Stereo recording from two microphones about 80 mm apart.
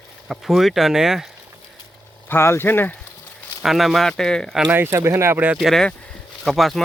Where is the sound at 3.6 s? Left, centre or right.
Centre.